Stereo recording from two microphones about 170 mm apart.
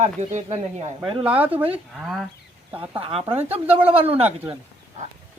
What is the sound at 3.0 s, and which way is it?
Speech, 35° right (ahead or behind).